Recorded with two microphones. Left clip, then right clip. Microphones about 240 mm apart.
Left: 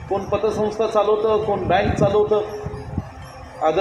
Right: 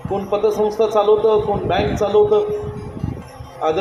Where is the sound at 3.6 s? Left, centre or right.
Right.